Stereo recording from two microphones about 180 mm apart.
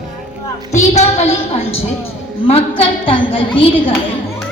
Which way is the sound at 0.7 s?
40° left (ahead or behind).